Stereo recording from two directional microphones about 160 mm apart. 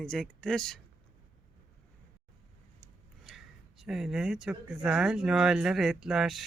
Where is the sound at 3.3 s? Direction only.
Centre (ahead or behind).